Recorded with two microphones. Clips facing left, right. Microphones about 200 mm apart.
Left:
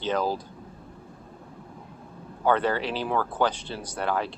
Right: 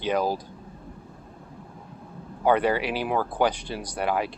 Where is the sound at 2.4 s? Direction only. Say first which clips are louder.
Right 2 dB; 15° right (ahead or behind).